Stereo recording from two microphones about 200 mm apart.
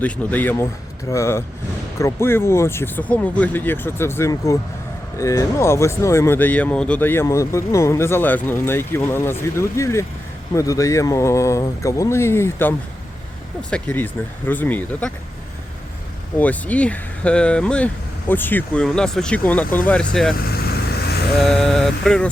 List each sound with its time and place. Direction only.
0.0 s speech: 10° left (ahead or behind)
16.4 s speech: 10° left (ahead or behind)
21.4 s speech: 5° left (ahead or behind)